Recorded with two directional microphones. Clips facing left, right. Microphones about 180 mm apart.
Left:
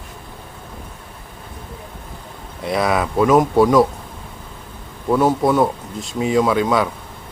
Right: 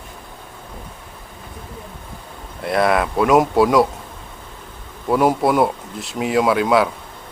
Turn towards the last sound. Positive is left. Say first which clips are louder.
# even
turn(degrees=-5)  # may be behind; listen again after turning